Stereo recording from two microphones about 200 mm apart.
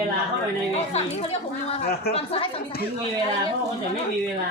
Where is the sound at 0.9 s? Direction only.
30° left (ahead or behind).